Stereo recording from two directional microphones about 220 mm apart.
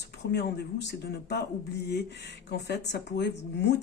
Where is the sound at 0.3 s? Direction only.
50° left (ahead or behind).